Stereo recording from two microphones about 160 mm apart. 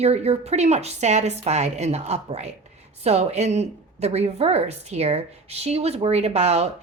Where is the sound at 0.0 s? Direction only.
40° right (ahead or behind).